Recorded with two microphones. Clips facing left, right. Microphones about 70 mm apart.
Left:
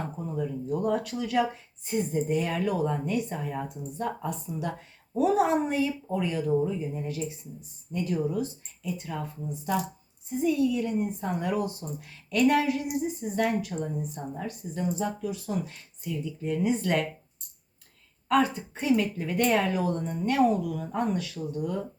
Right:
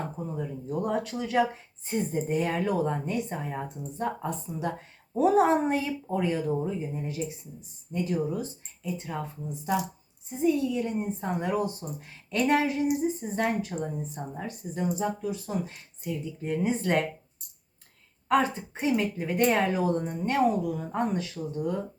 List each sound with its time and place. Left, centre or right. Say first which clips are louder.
0.3 s speech: left 3 dB; right
18.3 s speech: even; right